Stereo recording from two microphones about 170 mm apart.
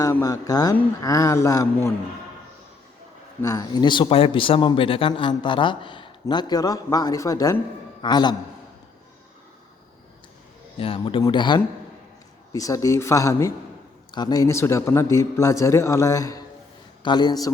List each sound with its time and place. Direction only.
0.0 s speech: 20° left (ahead or behind)
3.4 s speech: 20° left (ahead or behind)
10.8 s a man's voice: 35° left (ahead or behind)